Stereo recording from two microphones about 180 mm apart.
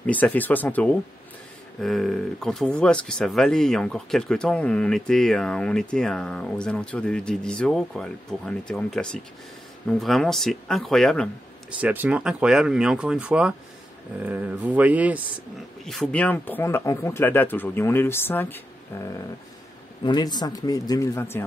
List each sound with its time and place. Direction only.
0.0 s speech: 10° left (ahead or behind)
11.8 s speech: 10° right (ahead or behind)
15.8 s speech: centre (ahead or behind)
20.0 s a man's voice: 25° left (ahead or behind)